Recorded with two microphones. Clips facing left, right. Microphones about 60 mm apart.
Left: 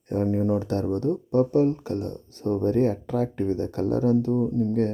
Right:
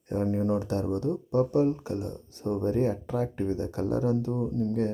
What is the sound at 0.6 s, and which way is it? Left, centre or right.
Speech, left.